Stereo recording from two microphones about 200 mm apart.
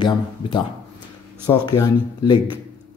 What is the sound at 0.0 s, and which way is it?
Speech, 25° left (ahead or behind).